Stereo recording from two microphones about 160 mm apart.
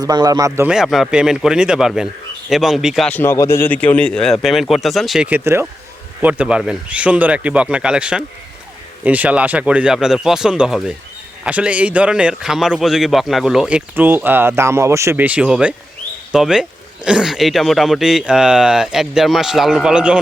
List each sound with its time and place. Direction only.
0.0 s speech: 25° right (ahead or behind)
0.7 s speech: centre (ahead or behind)
3.1 s a man's voice: 15° left (ahead or behind); by 20.1 s 5° right (ahead or behind)